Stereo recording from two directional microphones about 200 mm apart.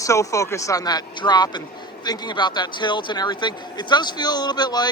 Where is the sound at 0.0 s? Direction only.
15° left (ahead or behind).